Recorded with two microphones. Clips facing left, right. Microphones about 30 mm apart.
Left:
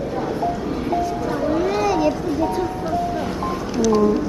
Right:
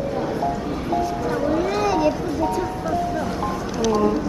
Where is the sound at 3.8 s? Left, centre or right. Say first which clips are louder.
Left 3 dB; right.